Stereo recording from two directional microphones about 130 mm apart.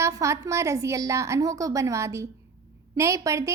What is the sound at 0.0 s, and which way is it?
A child's voice, 20° right (ahead or behind).